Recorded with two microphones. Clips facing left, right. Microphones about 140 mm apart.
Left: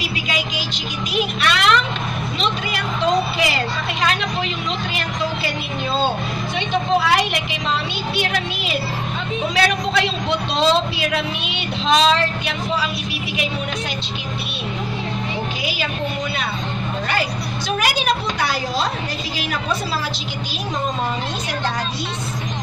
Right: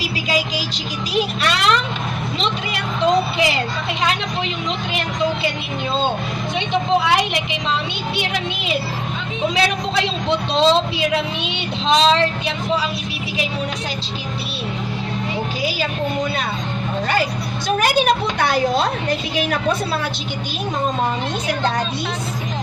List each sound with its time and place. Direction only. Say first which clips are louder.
0.3 s music: right 7 dB; 35° right (ahead or behind)
3.3 s a woman's voice: right 1 dB; 20° right (ahead or behind)
6.7 s a woman's voice: right 1 dB; 20° right (ahead or behind)
17.6 s a woman's voice: right 4 dB; 50° right (ahead or behind)